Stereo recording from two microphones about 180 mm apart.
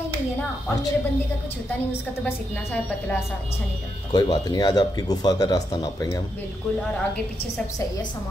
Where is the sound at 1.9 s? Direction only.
10° left (ahead or behind).